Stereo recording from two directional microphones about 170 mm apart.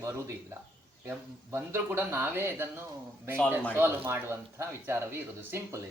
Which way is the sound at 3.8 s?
15° right (ahead or behind).